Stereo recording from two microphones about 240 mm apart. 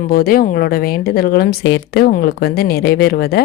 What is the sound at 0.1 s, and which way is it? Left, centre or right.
Speech, left.